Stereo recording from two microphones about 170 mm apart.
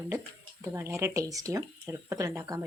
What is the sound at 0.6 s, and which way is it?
Speech, 15° right (ahead or behind).